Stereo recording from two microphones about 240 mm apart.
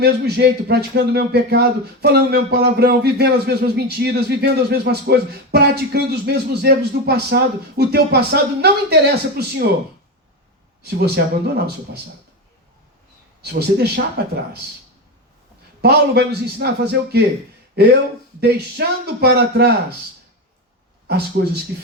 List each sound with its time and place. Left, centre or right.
0.0 s speech: right
11.0 s speech: right
13.4 s speech: right
15.8 s a man's voice: right
21.1 s speech: right